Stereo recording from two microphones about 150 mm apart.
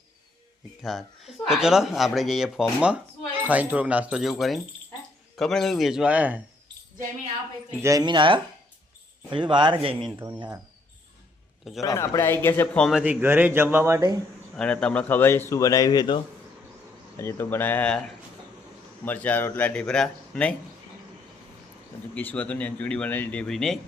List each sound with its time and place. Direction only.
0.8 s speech: centre (ahead or behind)
7.8 s speech: 20° right (ahead or behind)
11.8 s a man's voice: 20° left (ahead or behind)
12.9 s speech: 10° right (ahead or behind)
14.5 s a man's voice: 5° left (ahead or behind); by 16.2 s 30° left (ahead or behind)
17.2 s a man's voice: 15° left (ahead or behind)
19.0 s a man's voice: 10° left (ahead or behind)
22.1 s a man's voice: 10° left (ahead or behind)